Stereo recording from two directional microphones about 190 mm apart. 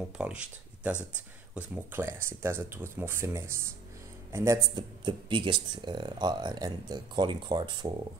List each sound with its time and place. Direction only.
0.2 s speech: 5° right (ahead or behind); by 7.9 s 25° right (ahead or behind)